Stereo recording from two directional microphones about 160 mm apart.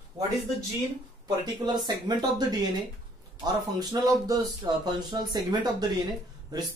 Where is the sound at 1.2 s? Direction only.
25° right (ahead or behind).